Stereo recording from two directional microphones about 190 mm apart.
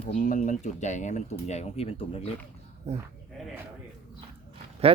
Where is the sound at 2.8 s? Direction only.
35° right (ahead or behind).